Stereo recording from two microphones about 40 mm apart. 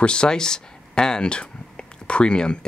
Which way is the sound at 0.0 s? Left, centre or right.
Left.